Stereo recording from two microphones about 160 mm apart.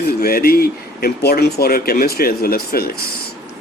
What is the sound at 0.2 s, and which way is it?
A man's voice, 70° left (ahead or behind).